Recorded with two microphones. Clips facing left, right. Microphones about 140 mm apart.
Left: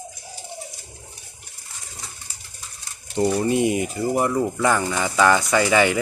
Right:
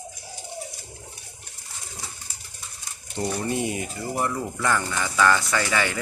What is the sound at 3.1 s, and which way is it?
Speech, 15° left (ahead or behind).